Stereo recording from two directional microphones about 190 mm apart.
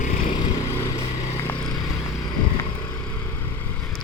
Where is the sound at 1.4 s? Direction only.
10° left (ahead or behind).